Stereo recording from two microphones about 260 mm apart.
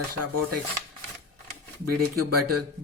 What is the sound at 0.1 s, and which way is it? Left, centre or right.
Speech, right.